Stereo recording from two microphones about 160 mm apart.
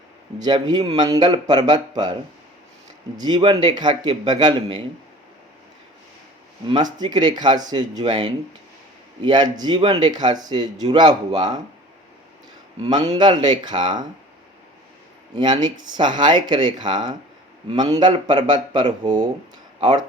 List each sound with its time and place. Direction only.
0.4 s speech: 25° right (ahead or behind)
3.2 s speech: 25° right (ahead or behind)
6.7 s speech: 25° right (ahead or behind)
13.1 s speech: 30° right (ahead or behind)
15.4 s speech: 25° right (ahead or behind)